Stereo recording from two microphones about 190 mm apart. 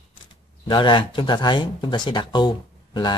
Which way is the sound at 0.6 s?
25° left (ahead or behind).